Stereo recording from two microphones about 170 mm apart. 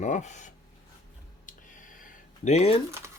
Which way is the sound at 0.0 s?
45° left (ahead or behind).